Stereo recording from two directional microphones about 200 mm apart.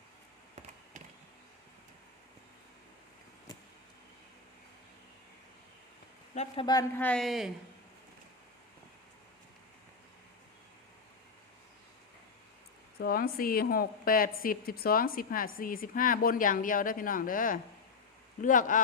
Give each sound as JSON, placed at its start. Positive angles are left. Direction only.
{"t": 6.3, "sound": "speech", "side_deg": 35}
{"t": 7.0, "sound": "speech", "side_deg": 5}
{"t": 13.0, "sound": "a woman's voice", "side_deg": 50}